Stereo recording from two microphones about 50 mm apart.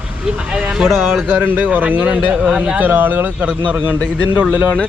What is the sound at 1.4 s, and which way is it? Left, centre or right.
Speech, right.